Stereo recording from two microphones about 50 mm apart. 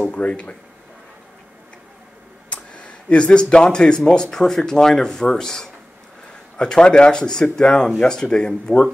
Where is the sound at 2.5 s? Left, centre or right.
Left.